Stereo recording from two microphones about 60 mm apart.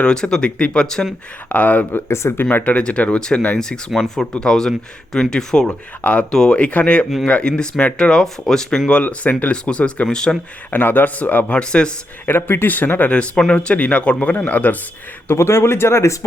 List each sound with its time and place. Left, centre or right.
0.0 s speech: centre
1.5 s speech: left
2.0 s speech: left
2.4 s speech: left; by 5.6 s centre
5.6 s speech: left
6.3 s speech: centre
8.9 s speech: left
10.7 s speech: left; by 11.9 s centre
12.2 s speech: left
13.1 s speech: centre
15.3 s speech: left